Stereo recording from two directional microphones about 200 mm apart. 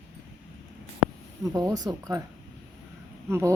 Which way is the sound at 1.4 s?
15° right (ahead or behind).